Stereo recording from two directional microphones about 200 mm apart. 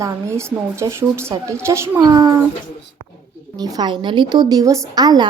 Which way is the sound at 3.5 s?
20° right (ahead or behind).